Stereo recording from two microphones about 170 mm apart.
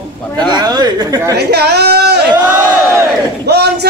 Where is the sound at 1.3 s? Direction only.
70° right (ahead or behind).